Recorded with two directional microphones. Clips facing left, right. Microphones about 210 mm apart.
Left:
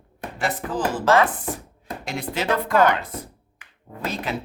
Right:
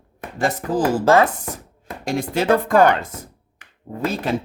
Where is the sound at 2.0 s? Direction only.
45° right (ahead or behind).